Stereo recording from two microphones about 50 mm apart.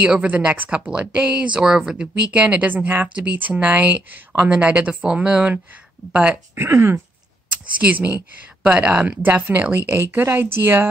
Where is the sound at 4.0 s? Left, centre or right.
Right.